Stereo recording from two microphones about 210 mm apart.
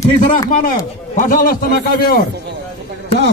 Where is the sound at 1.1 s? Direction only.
40° left (ahead or behind).